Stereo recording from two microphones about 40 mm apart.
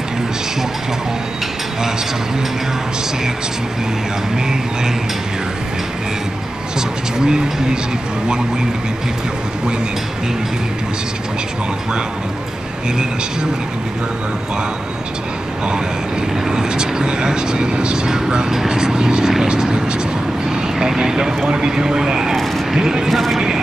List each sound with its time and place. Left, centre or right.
7.2 s speech: centre
16.4 s speech: centre
20.4 s vehicle: centre
21.5 s speech: centre
22.3 s speech: centre
22.8 s speech: centre
23.0 s speech: centre